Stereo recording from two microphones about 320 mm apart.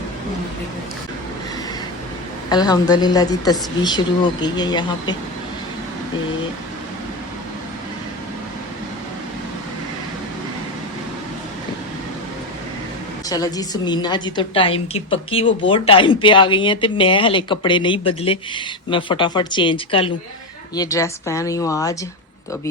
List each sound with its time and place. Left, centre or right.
2.5 s a woman's voice: centre
13.2 s a woman's voice: centre